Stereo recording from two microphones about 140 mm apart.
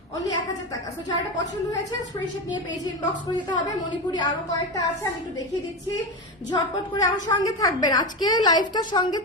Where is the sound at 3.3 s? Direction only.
30° left (ahead or behind).